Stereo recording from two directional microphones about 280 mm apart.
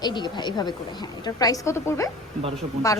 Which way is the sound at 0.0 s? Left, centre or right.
Centre.